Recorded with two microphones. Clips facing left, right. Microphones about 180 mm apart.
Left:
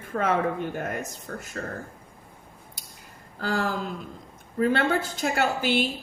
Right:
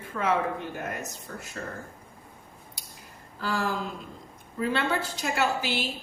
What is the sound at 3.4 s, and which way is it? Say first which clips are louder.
Speech: left 2 dB; 55° left (ahead or behind).